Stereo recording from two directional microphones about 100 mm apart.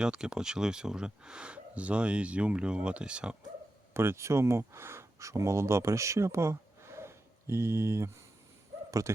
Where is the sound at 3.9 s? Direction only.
25° right (ahead or behind).